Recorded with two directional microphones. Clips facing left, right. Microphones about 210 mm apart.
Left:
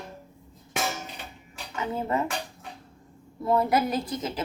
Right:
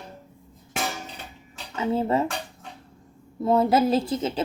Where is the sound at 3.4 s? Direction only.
25° right (ahead or behind).